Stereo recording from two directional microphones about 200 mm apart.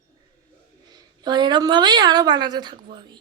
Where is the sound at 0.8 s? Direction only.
20° right (ahead or behind).